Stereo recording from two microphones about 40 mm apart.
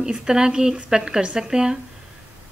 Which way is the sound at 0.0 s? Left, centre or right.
Centre.